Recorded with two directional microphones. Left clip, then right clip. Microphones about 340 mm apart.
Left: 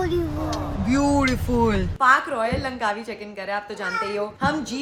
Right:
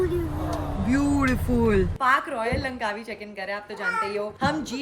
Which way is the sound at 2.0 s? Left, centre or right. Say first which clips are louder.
Left 4 dB; centre.